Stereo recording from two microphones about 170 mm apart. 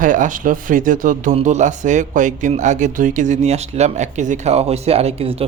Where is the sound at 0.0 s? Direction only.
50° right (ahead or behind).